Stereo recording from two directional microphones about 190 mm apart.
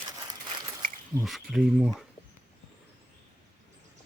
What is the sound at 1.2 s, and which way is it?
Speech, centre (ahead or behind).